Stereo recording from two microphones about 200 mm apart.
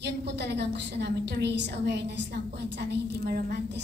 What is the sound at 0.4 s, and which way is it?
A woman's voice, 60° right (ahead or behind).